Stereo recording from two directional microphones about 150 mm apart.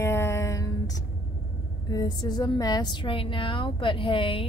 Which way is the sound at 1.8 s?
25° left (ahead or behind).